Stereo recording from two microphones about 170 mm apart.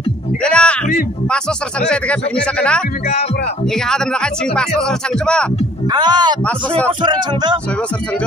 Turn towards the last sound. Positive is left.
turn(degrees=-25)  # may be behind; listen again after turning